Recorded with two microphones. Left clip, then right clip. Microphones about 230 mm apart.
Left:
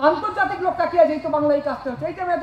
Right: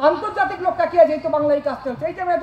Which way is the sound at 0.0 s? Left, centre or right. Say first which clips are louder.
Right 1 dB; right.